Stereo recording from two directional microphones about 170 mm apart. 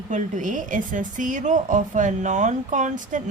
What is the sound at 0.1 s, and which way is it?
A woman's voice, 45° right (ahead or behind).